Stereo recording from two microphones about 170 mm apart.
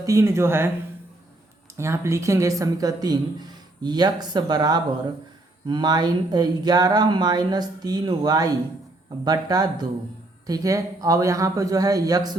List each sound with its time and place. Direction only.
0.0 s speech: 15° right (ahead or behind)
1.8 s speech: 15° right (ahead or behind)